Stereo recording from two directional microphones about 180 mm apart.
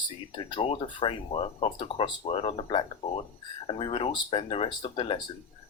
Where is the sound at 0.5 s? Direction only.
30° left (ahead or behind).